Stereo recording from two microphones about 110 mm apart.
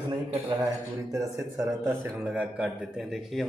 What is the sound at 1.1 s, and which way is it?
A man's voice, 30° right (ahead or behind).